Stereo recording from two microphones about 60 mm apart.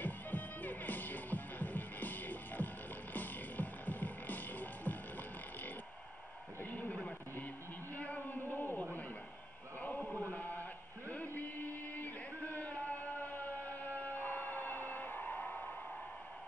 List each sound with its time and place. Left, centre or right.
0.0 s music: left
6.6 s a sound: left
11.9 s music: left